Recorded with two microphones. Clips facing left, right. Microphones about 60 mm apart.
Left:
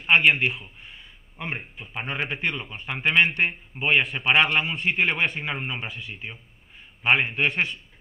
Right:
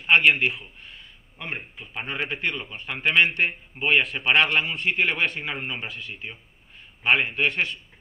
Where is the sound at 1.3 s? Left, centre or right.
Centre.